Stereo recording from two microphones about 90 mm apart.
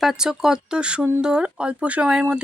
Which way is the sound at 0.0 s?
5° right (ahead or behind).